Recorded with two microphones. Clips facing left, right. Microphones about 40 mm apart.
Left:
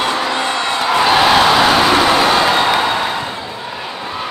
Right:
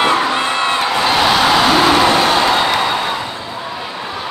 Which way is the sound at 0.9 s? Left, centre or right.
Centre.